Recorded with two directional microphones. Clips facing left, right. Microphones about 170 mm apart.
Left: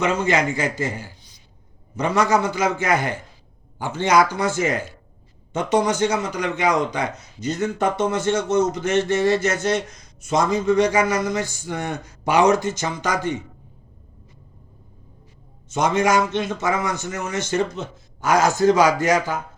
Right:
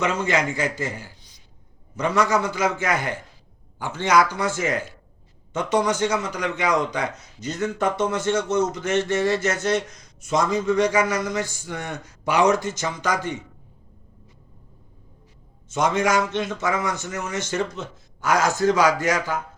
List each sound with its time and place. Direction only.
0.0 s a man's voice: 20° left (ahead or behind)
2.0 s a man's voice: 25° left (ahead or behind)
15.7 s a man's voice: 20° left (ahead or behind)